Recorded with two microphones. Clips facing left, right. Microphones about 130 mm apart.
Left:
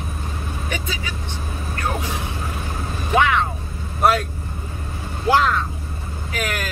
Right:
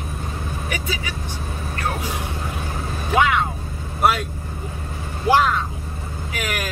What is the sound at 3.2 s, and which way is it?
Speech, 10° right (ahead or behind).